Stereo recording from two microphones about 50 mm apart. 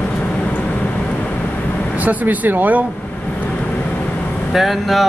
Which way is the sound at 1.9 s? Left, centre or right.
Right.